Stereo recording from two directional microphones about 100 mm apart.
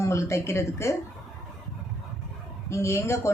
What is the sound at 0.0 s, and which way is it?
Speech, 30° left (ahead or behind).